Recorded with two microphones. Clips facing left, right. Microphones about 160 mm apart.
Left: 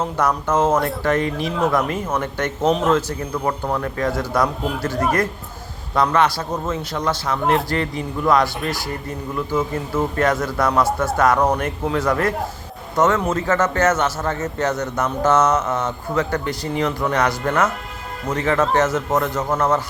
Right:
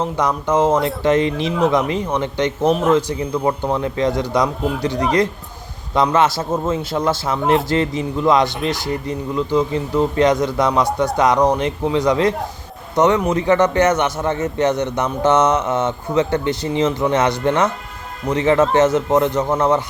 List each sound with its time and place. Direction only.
0.2 s a man's voice: 15° right (ahead or behind)
1.4 s speech: centre (ahead or behind)
1.9 s a man's voice: 15° right (ahead or behind)
8.4 s speech: centre (ahead or behind)
9.0 s a man's voice: 20° right (ahead or behind)